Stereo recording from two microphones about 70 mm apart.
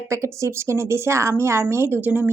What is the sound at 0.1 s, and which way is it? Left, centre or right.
A woman's voice, right.